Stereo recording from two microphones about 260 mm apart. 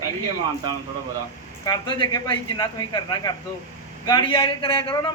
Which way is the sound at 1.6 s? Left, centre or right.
Centre.